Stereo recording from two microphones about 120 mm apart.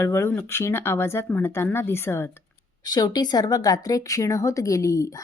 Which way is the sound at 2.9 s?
35° left (ahead or behind).